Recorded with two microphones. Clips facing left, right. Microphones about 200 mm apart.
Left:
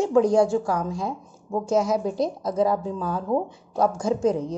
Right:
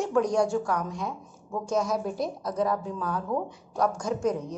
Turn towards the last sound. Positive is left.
turn(degrees=30)  # may be behind; listen again after turning